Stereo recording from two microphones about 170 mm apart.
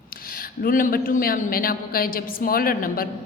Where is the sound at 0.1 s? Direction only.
60° left (ahead or behind).